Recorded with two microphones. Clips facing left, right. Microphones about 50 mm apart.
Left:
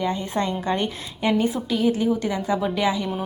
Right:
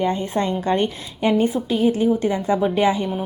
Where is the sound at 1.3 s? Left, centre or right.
Right.